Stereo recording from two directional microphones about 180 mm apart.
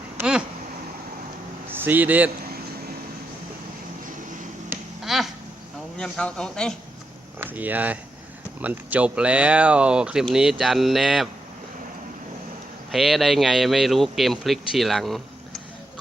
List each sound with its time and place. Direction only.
0.2 s a sound: 5° right (ahead or behind)
1.7 s speech: 10° right (ahead or behind)
5.0 s a sound: centre (ahead or behind)
6.0 s speech: 5° left (ahead or behind)
7.3 s speech: 10° right (ahead or behind)
12.9 s speech: centre (ahead or behind)